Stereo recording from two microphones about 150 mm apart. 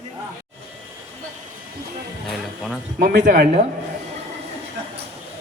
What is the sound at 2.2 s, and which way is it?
Music, centre (ahead or behind).